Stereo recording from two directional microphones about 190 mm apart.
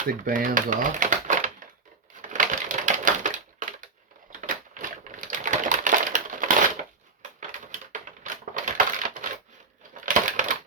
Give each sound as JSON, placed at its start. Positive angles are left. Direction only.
{"t": 0.1, "sound": "speech", "side_deg": -45}
{"t": 2.3, "sound": "typewriter", "side_deg": -40}
{"t": 8.2, "sound": "crushing", "side_deg": -40}